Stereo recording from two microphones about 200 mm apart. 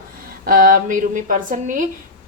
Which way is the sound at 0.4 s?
45° right (ahead or behind).